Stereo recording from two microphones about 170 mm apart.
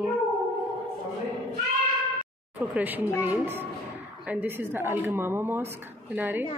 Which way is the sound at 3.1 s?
20° left (ahead or behind).